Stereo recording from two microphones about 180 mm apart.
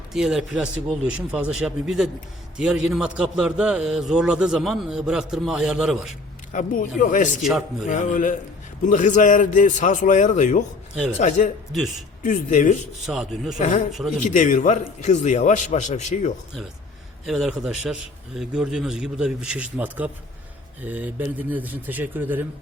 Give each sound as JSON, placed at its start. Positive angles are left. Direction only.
{"t": 0.1, "sound": "a man's voice", "side_deg": 0}
{"t": 6.5, "sound": "a man's voice", "side_deg": 45}
{"t": 7.4, "sound": "a man's voice", "side_deg": 0}
{"t": 7.9, "sound": "a man's voice", "side_deg": 45}
{"t": 11.7, "sound": "a man's voice", "side_deg": 0}
{"t": 12.2, "sound": "a man's voice", "side_deg": 45}
{"t": 13.1, "sound": "a man's voice", "side_deg": 0}
{"t": 14.3, "sound": "a man's voice", "side_deg": 45}
{"t": 17.2, "sound": "a man's voice", "side_deg": 0}